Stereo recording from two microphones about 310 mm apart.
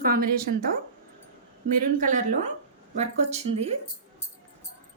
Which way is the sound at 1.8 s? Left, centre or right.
Right.